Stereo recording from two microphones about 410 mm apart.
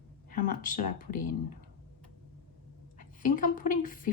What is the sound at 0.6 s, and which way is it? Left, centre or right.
Speech, centre.